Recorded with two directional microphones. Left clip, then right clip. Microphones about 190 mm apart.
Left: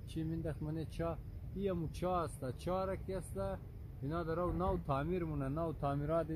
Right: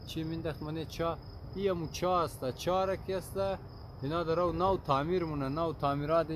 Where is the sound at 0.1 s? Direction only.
35° left (ahead or behind).